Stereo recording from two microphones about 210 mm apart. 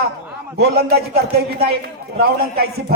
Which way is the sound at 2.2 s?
50° right (ahead or behind).